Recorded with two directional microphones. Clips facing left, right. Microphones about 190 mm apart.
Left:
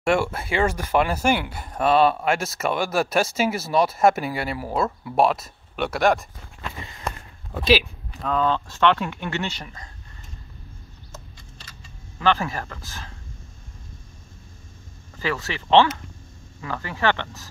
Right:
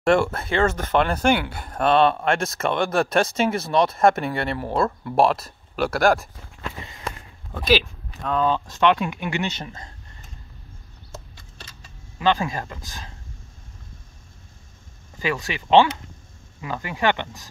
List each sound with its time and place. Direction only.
0.0 s speech: 5° left (ahead or behind)
7.5 s speech: 5° left (ahead or behind)
8.5 s speech: 15° right (ahead or behind)
12.2 s speech: 15° right (ahead or behind)
15.1 s speech: 15° right (ahead or behind)